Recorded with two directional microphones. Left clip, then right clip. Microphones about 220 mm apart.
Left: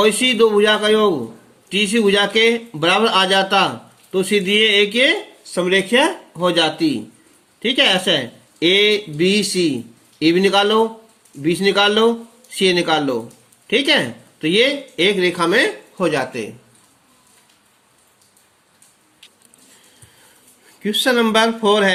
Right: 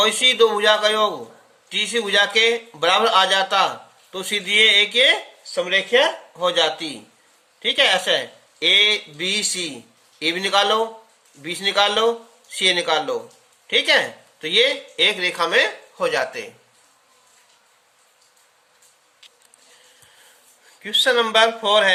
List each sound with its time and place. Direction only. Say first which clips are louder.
0.0 s speech: left 1 dB; 5° left (ahead or behind)
5.5 s speech: left 2 dB; 20° left (ahead or behind)
6.3 s speech: left 3 dB; 10° left (ahead or behind)
20.8 s speech: left 1 dB; 5° left (ahead or behind)